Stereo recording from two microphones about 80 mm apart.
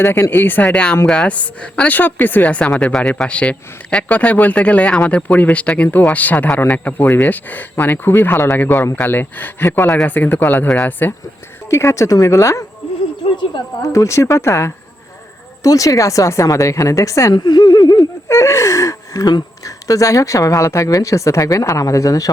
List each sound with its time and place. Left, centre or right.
0.0 s a man's voice: left
0.6 s a woman's voice: centre
9.8 s a woman's voice: centre
10.1 s a man's voice: left
11.7 s speech: left
13.8 s speech: left
17.3 s speech: left
18.3 s speech: left